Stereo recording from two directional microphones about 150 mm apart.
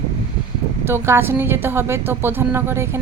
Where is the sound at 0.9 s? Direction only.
15° right (ahead or behind).